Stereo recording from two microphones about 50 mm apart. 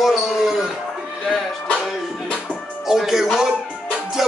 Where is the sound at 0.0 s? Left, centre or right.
Centre.